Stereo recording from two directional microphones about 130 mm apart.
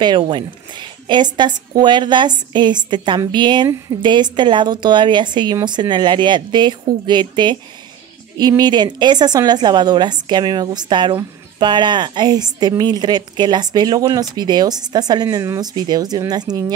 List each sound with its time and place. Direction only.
0.0 s a woman's voice: 35° right (ahead or behind)